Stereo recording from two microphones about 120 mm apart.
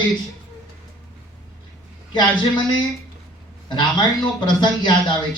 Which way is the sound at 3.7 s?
40° left (ahead or behind).